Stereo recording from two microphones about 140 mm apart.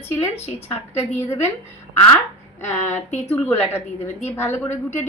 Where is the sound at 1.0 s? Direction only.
15° left (ahead or behind).